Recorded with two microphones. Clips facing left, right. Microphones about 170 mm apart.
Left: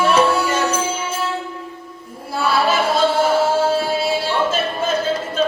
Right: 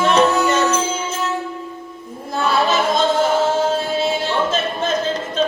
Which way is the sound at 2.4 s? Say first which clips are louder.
Even; 10° left (ahead or behind).